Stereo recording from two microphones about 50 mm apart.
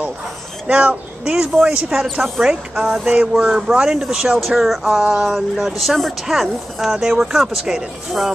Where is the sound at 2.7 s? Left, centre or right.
Centre.